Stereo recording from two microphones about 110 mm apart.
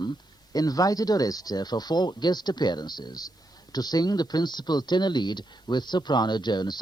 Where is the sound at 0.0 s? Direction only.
40° left (ahead or behind).